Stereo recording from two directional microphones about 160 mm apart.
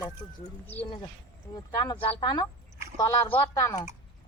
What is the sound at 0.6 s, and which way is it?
Speech, 10° left (ahead or behind).